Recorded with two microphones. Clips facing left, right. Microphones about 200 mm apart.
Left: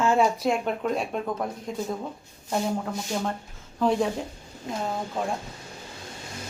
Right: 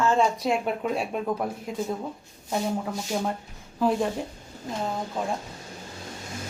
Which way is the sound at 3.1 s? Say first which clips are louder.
Right 2 dB; 5° right (ahead or behind).